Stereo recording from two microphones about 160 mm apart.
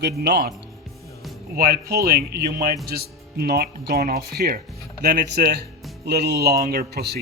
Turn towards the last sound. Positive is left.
turn(degrees=-80)